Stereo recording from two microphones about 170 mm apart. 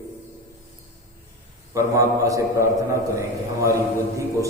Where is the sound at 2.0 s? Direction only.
20° right (ahead or behind).